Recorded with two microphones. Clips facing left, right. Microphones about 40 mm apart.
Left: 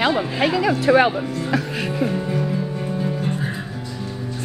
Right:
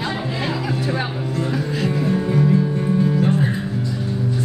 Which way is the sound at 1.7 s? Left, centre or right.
Left.